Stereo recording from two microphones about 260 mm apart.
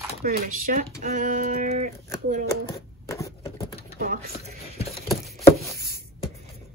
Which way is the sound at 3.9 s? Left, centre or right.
Right.